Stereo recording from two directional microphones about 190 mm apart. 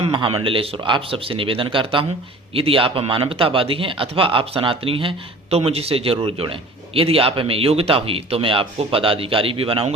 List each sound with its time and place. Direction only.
0.0 s speech: 25° right (ahead or behind)